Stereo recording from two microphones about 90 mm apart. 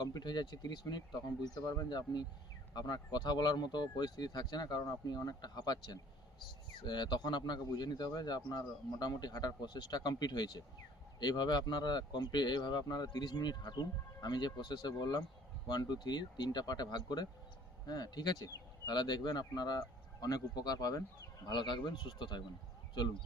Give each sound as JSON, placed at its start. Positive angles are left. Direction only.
{"t": 0.0, "sound": "speech", "side_deg": 50}
{"t": 1.5, "sound": "speech", "side_deg": 40}
{"t": 21.4, "sound": "speech", "side_deg": 60}